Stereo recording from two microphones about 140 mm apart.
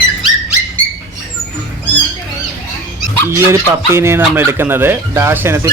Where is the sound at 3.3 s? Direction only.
20° right (ahead or behind).